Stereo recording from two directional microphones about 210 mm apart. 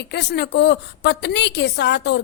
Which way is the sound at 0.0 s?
55° left (ahead or behind).